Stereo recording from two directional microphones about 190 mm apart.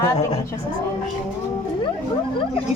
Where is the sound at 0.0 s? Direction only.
15° left (ahead or behind).